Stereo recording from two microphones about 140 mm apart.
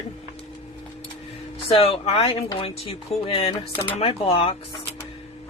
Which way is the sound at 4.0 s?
40° left (ahead or behind).